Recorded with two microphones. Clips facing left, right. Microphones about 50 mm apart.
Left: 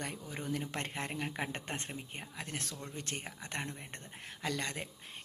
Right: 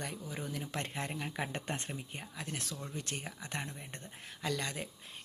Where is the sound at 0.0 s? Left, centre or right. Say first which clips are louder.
Even; left.